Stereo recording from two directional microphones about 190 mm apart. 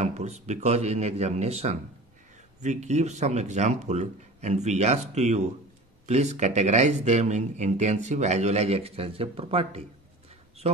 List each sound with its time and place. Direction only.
0.0 s speech: 35° right (ahead or behind)